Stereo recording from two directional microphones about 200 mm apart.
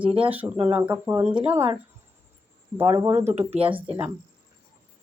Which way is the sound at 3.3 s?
30° right (ahead or behind).